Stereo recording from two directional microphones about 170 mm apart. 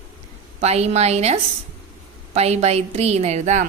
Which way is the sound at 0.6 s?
40° right (ahead or behind).